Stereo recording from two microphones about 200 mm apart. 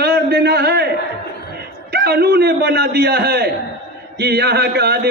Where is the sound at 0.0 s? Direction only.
55° right (ahead or behind).